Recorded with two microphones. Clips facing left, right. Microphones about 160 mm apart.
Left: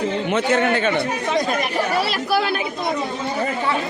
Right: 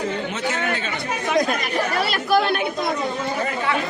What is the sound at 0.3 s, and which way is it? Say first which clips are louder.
Speech: left 6 dB; 60° left (ahead or behind).